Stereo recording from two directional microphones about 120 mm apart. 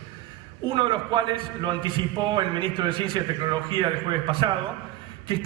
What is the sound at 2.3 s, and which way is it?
Speech, 45° right (ahead or behind).